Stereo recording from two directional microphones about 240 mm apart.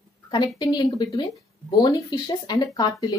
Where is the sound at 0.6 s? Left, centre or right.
Centre.